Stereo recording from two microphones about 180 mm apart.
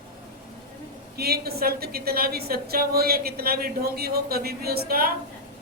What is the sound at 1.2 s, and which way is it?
A woman's voice, 60° right (ahead or behind).